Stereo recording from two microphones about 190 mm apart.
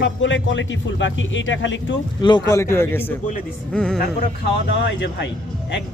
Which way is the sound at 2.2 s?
25° left (ahead or behind).